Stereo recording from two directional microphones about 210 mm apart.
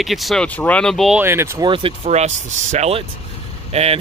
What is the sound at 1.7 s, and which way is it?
Speech, 30° right (ahead or behind).